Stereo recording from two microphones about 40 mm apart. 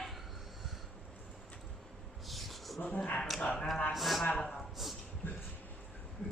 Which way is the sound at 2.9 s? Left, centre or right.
Left.